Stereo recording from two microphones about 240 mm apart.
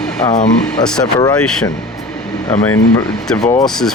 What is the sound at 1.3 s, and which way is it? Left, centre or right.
Speech, centre.